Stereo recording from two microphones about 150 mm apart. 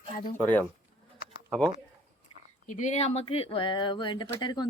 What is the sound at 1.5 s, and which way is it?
Speech, 5° left (ahead or behind).